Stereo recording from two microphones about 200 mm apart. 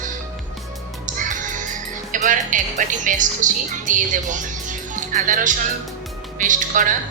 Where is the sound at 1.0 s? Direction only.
40° right (ahead or behind).